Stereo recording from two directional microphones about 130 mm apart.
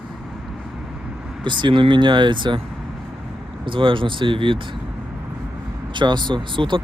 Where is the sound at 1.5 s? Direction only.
35° right (ahead or behind).